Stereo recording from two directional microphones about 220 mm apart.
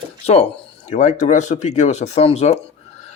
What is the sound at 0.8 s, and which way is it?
Speech, 30° left (ahead or behind).